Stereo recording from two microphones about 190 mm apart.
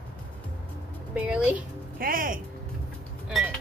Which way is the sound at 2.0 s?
50° right (ahead or behind).